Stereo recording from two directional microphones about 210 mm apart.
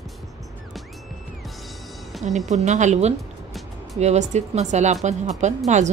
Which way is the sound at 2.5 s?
35° right (ahead or behind).